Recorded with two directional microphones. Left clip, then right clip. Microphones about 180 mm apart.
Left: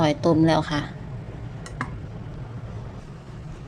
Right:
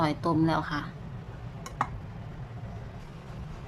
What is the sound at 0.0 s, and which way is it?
Speech, 10° left (ahead or behind).